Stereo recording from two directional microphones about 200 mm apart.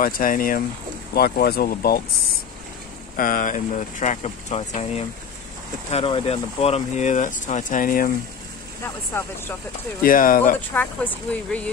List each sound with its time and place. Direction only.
0.0 s speech: 45° left (ahead or behind)
3.2 s speech: 45° left (ahead or behind)
10.0 s speech: 45° left (ahead or behind)
10.7 s speech: 10° left (ahead or behind)